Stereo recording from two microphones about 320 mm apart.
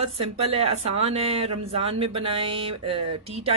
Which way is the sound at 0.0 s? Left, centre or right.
Centre.